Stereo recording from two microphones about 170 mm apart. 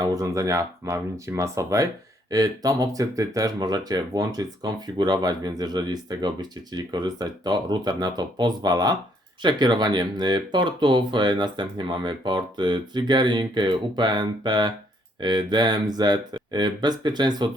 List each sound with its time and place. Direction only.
0.0 s speech: 20° right (ahead or behind)